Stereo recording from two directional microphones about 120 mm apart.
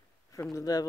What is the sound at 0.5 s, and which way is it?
Speech, 30° left (ahead or behind).